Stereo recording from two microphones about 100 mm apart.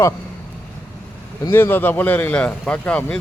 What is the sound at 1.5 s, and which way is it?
Speech, 20° left (ahead or behind).